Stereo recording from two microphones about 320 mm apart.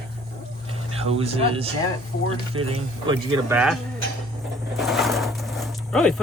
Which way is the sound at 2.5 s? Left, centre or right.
Right.